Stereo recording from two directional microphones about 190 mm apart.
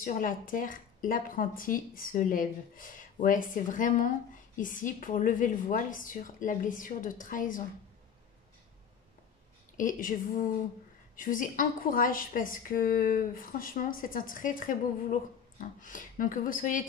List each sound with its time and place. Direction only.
0.0 s a woman's voice: 45° left (ahead or behind)
9.8 s a woman's voice: 45° left (ahead or behind)